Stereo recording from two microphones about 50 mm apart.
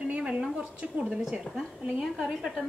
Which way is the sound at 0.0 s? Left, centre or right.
Right.